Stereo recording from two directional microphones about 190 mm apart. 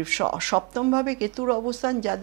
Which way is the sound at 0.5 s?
20° right (ahead or behind).